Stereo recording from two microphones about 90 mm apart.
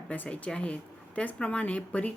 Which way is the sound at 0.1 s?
15° left (ahead or behind).